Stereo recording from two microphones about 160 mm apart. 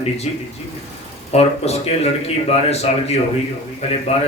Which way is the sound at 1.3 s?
40° left (ahead or behind).